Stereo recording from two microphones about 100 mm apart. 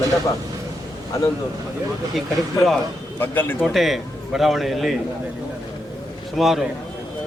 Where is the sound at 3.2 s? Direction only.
20° left (ahead or behind).